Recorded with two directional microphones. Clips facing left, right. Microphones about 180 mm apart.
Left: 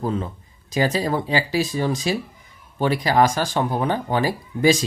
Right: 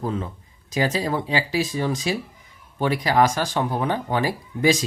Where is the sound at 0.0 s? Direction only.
35° left (ahead or behind).